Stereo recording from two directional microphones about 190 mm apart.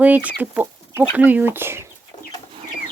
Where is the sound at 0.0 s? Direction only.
10° right (ahead or behind).